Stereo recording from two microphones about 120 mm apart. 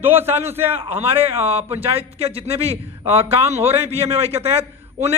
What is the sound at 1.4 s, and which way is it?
A man's voice, 55° right (ahead or behind).